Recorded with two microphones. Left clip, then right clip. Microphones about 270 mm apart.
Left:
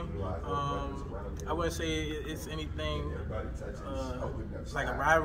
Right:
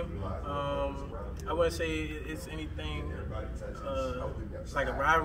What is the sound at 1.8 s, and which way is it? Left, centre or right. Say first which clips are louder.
Speech: right 1 dB; right.